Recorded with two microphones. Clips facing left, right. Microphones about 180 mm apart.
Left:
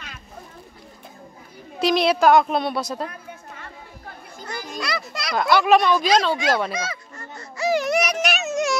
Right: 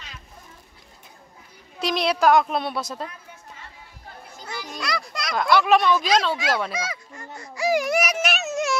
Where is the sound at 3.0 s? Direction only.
55° left (ahead or behind).